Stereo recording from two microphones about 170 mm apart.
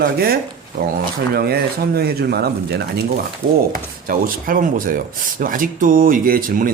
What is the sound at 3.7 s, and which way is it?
Speech, 55° right (ahead or behind).